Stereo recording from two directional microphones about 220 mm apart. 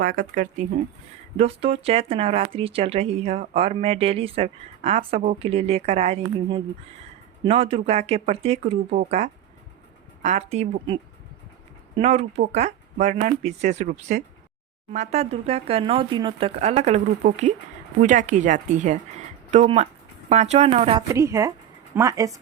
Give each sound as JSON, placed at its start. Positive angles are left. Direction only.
{"t": 0.0, "sound": "speech", "side_deg": -40}
{"t": 11.9, "sound": "speech", "side_deg": -30}
{"t": 21.1, "sound": "a woman's voice", "side_deg": -15}